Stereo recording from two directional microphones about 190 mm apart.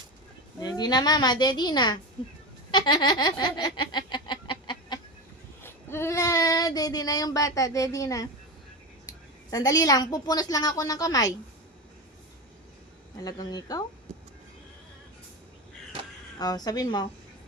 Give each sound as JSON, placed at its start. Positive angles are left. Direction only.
{"t": 0.6, "sound": "a woman's voice", "side_deg": 20}
{"t": 2.7, "sound": "baby laughter", "side_deg": 25}
{"t": 5.6, "sound": "child singing", "side_deg": 10}
{"t": 9.0, "sound": "a woman's voice", "side_deg": 20}
{"t": 13.1, "sound": "a woman's voice", "side_deg": 20}
{"t": 14.1, "sound": "music", "side_deg": -35}
{"t": 16.4, "sound": "a woman's voice", "side_deg": 20}